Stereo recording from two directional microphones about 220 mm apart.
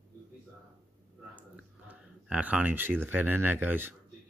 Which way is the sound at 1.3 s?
5° right (ahead or behind).